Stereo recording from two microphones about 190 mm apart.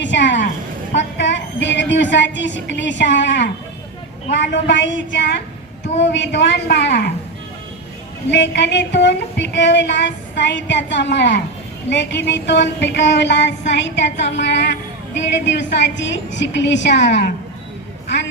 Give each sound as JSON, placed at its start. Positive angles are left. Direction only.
{"t": 0.0, "sound": "a sound", "side_deg": 70}
{"t": 0.9, "sound": "a woman's voice", "side_deg": 70}
{"t": 8.3, "sound": "a woman's voice", "side_deg": 65}